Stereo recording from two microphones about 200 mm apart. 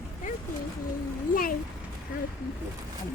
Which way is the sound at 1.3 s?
45° left (ahead or behind).